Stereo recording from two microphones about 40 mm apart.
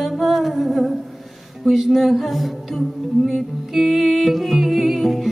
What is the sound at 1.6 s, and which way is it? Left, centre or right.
Music, centre.